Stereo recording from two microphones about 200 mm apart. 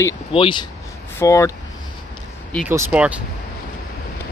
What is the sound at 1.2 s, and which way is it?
Speech, 15° left (ahead or behind).